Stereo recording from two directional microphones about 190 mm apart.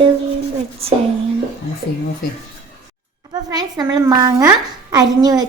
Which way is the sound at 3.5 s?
20° right (ahead or behind).